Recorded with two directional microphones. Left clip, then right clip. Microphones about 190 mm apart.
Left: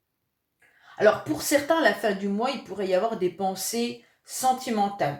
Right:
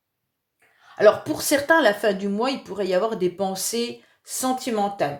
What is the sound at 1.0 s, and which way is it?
Speech, 45° right (ahead or behind).